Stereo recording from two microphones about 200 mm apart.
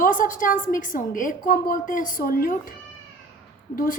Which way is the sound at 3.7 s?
45° left (ahead or behind).